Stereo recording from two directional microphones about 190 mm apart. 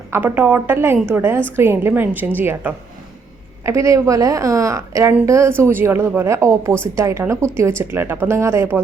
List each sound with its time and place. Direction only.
0.1 s a woman's voice: 10° right (ahead or behind)